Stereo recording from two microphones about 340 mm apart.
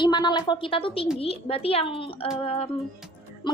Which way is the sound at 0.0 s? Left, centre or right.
Centre.